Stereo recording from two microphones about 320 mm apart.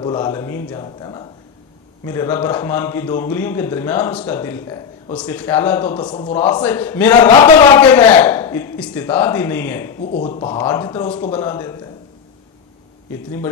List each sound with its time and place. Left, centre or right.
0.0 s a man's voice: centre
7.2 s a man's voice: centre
7.8 s a man's voice: centre